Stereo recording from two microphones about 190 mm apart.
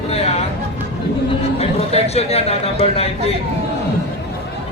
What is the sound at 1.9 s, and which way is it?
Speech, 35° left (ahead or behind).